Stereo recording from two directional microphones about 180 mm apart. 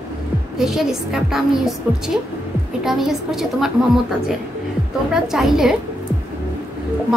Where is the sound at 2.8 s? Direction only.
Centre (ahead or behind).